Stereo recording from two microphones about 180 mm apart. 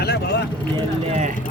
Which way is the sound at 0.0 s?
65° left (ahead or behind).